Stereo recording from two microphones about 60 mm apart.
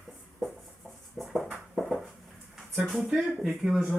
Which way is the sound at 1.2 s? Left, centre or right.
Centre.